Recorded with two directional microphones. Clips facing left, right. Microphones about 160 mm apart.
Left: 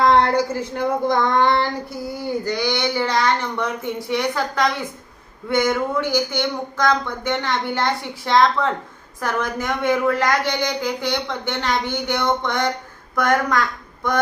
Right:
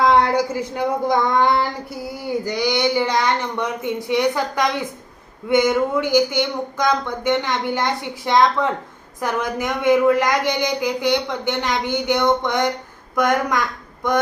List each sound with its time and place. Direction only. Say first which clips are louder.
0.0 s a woman's voice: even; 10° right (ahead or behind)